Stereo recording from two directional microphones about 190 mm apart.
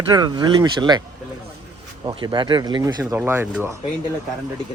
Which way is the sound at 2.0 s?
25° right (ahead or behind).